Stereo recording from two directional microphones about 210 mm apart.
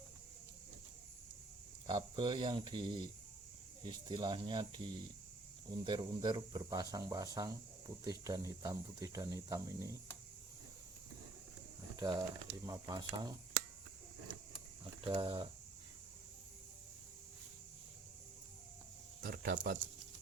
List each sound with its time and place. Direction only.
1.9 s speech: 20° right (ahead or behind)
11.9 s speech: 20° right (ahead or behind)
15.0 s speech: 25° right (ahead or behind)
19.2 s speech: 45° right (ahead or behind)